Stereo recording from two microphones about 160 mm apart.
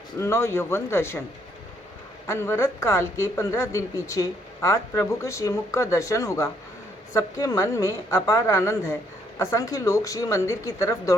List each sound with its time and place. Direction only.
0.2 s speech: 15° left (ahead or behind)
2.2 s speech: 15° left (ahead or behind)